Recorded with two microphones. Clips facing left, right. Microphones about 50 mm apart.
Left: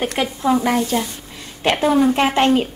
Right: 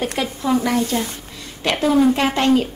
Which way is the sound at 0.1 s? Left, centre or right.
Left.